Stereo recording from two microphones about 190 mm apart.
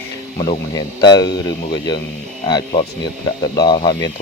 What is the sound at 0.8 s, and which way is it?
Speech, 20° left (ahead or behind).